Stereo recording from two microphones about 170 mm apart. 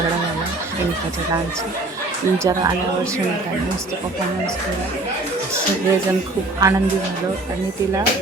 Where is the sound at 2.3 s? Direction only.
15° right (ahead or behind).